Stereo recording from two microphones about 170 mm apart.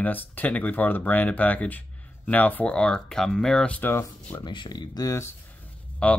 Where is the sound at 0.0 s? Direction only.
10° left (ahead or behind).